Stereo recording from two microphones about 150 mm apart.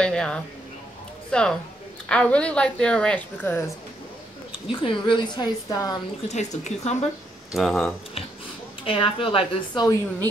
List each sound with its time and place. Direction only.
0.0 s a woman's voice: 5° left (ahead or behind)
4.8 s a woman's voice: 35° left (ahead or behind)
6.2 s speech: 50° left (ahead or behind)
7.5 s a woman's voice: centre (ahead or behind)
8.8 s a woman's voice: 35° left (ahead or behind)